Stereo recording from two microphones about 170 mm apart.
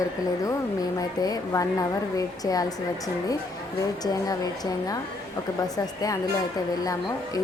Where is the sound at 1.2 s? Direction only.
20° left (ahead or behind).